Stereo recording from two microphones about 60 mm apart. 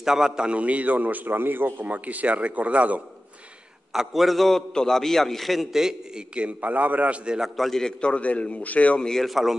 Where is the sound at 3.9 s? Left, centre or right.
Centre.